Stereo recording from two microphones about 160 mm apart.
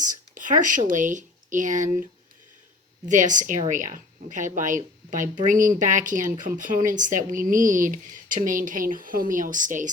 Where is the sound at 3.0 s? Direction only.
50° right (ahead or behind).